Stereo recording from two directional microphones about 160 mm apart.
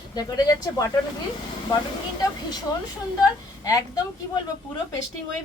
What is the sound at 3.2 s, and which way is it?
Speech, 20° left (ahead or behind).